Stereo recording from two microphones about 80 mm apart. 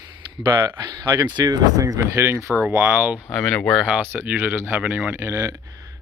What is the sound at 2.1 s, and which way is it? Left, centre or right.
Speech, right.